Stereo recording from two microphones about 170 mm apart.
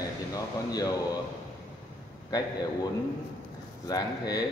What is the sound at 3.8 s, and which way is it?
Speech, 25° left (ahead or behind).